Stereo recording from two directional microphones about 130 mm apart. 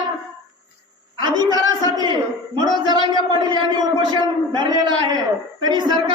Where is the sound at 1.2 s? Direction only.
35° right (ahead or behind).